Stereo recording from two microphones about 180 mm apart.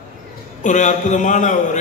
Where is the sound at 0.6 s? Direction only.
40° left (ahead or behind).